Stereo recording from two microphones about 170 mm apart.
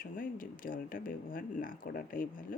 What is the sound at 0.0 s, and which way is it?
Speech, 55° left (ahead or behind).